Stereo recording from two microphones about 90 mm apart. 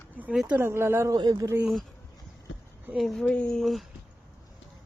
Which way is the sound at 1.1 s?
45° right (ahead or behind).